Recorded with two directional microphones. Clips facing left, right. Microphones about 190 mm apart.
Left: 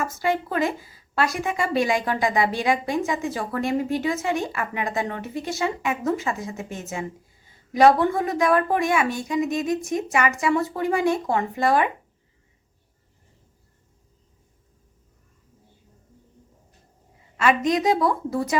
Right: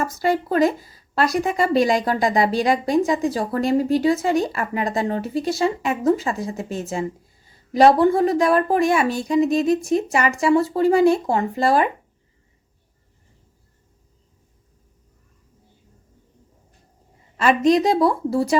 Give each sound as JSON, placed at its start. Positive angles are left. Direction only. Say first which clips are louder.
{"t": 0.0, "sound": "a woman's voice", "louder": "right 3 dB", "side_deg": -35}
{"t": 17.7, "sound": "a woman's voice", "louder": "right 4 dB", "side_deg": -35}